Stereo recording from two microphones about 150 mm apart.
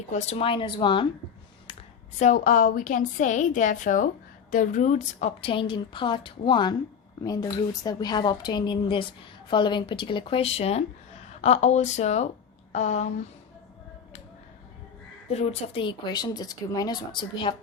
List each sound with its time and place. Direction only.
0.1 s speech: 50° left (ahead or behind); by 1.0 s 30° left (ahead or behind)
2.1 s a woman's voice: 55° left (ahead or behind)
5.4 s a woman's voice: 35° left (ahead or behind)
15.3 s speech: 45° left (ahead or behind)